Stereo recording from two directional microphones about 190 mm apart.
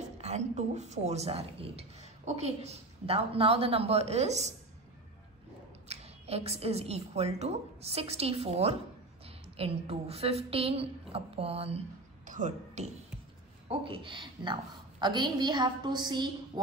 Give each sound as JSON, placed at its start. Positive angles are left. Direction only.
{"t": 0.2, "sound": "speech", "side_deg": -35}
{"t": 5.9, "sound": "speech", "side_deg": -35}
{"t": 13.7, "sound": "a woman's voice", "side_deg": -30}